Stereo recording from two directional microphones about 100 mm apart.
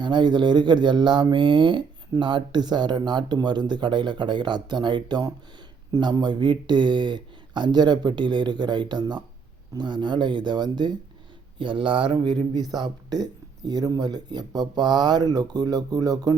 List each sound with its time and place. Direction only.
0.0 s speech: 50° right (ahead or behind)
11.6 s speech: 60° right (ahead or behind); by 16.3 s 40° right (ahead or behind)